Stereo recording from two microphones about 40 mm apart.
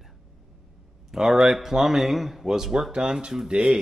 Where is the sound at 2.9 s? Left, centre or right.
Centre.